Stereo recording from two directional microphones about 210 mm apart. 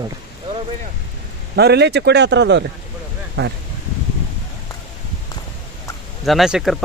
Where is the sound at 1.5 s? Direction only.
50° right (ahead or behind).